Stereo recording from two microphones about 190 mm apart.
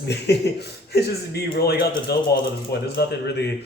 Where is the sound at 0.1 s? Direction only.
60° left (ahead or behind).